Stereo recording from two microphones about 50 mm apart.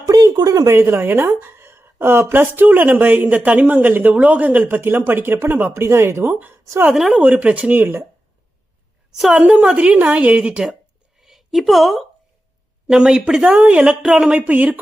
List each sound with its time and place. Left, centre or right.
0.7 s speech: right
1.0 s a woman's voice: right
5.7 s speech: right
6.9 s speech: centre
7.2 s a woman's voice: right
7.7 s a woman's voice: right
9.4 s a woman's voice: right
11.2 s a woman's voice: centre
12.9 s a woman's voice: centre
14.3 s a woman's voice: right